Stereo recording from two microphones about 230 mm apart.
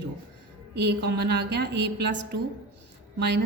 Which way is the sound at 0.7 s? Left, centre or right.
Right.